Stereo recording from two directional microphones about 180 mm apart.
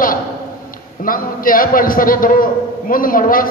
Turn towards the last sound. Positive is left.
turn(degrees=50)  # may be behind; listen again after turning